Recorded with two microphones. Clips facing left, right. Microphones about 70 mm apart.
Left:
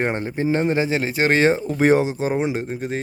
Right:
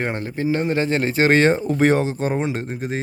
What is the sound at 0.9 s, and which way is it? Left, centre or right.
Speech, centre.